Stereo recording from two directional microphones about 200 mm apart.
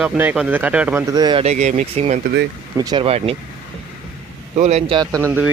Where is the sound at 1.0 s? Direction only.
20° right (ahead or behind); by 2.2 s 35° right (ahead or behind).